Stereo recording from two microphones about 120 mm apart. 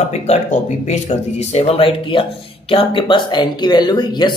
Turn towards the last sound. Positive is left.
turn(degrees=40)  # may be behind; listen again after turning